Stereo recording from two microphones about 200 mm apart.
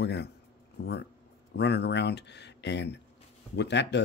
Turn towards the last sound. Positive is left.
turn(degrees=60)  # may be behind; listen again after turning